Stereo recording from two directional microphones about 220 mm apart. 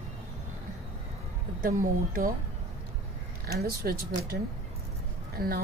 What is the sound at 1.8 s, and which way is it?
Speech, 40° right (ahead or behind).